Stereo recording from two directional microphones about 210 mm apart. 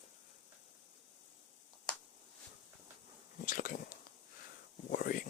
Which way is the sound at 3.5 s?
40° left (ahead or behind).